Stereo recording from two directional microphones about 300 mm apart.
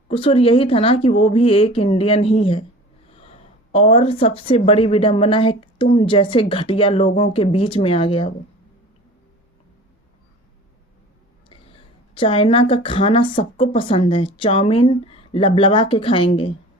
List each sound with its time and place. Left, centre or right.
0.1 s speech: centre
11.4 s speech: centre